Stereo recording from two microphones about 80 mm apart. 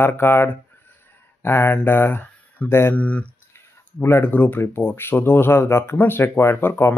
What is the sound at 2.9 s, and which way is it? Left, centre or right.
Speech, centre.